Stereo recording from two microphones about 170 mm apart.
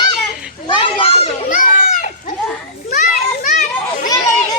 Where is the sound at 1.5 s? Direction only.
55° left (ahead or behind).